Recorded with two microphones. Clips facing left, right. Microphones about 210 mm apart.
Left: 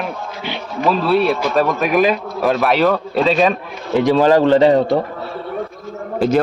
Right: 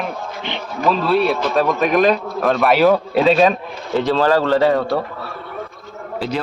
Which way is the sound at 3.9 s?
15° left (ahead or behind).